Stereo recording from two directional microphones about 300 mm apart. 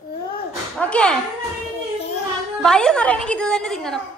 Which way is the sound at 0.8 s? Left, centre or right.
Centre.